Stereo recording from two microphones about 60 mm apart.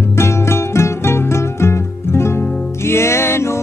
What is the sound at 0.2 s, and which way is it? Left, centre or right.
Music, left.